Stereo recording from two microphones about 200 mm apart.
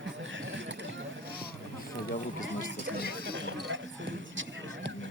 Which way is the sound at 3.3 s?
65° right (ahead or behind).